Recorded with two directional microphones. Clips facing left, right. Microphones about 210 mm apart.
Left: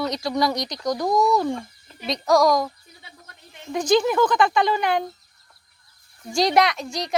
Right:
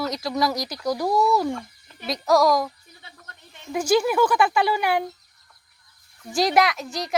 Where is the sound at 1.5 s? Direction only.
20° left (ahead or behind).